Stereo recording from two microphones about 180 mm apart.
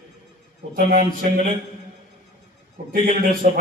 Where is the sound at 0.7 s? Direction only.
50° right (ahead or behind).